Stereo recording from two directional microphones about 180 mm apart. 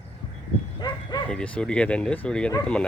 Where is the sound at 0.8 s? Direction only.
25° left (ahead or behind).